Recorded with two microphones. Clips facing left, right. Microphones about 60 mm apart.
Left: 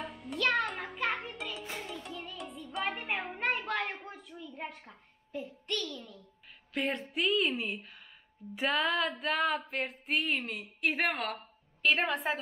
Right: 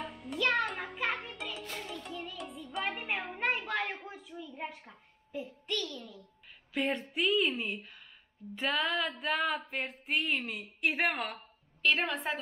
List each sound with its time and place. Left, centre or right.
0.0 s music: centre
6.7 s a woman's voice: centre